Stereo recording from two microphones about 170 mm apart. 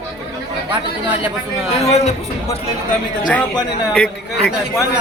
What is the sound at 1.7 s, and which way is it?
Speech, 40° left (ahead or behind).